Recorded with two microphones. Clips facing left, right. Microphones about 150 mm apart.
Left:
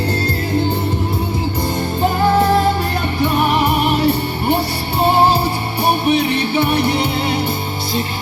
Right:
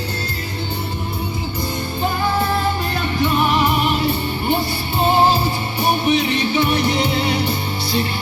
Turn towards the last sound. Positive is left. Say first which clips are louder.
# left 2 dB
turn(degrees=55)  # may be behind; listen again after turning